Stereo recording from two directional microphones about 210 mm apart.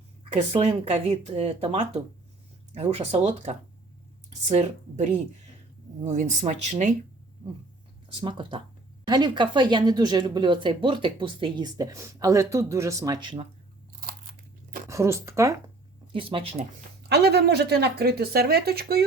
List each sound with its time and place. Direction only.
0.3 s speech: 25° right (ahead or behind)
8.2 s speech: 25° right (ahead or behind)
14.8 s speech: 15° right (ahead or behind)
16.1 s speech: 25° right (ahead or behind)
17.0 s speech: 50° right (ahead or behind)